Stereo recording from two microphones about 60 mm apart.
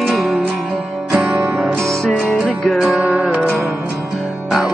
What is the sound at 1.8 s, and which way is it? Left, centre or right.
Music, centre.